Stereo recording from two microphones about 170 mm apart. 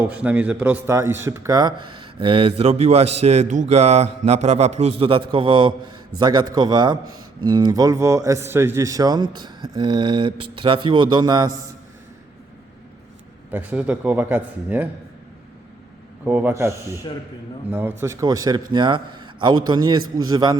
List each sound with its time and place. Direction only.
0.0 s a man's voice: 10° right (ahead or behind); by 11.5 s 25° right (ahead or behind)
13.5 s a man's voice: 10° right (ahead or behind)
16.2 s a man's voice: 10° right (ahead or behind)